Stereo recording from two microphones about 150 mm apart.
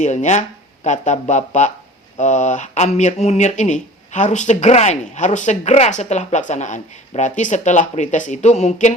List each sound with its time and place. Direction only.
0.0 s speech: 50° left (ahead or behind)